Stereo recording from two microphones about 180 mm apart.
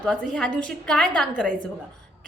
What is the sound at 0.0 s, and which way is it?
A woman's voice, 5° left (ahead or behind).